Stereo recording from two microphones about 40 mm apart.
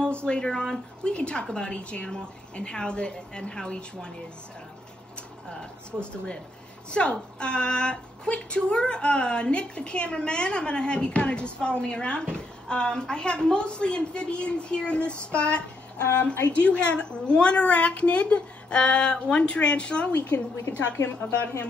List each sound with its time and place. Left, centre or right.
0.0 s speech: left
1.0 s a woman's voice: left
5.5 s a woman's voice: left
16.6 s a woman's voice: left
20.1 s a woman's voice: left